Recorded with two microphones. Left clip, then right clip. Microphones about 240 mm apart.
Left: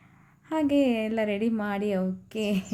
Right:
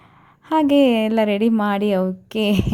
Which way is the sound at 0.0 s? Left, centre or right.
Right.